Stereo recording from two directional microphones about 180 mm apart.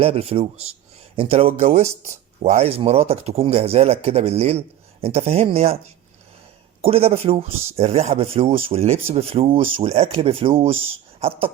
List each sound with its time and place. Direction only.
0.0 s speech: 35° right (ahead or behind)
6.8 s speech: 35° right (ahead or behind)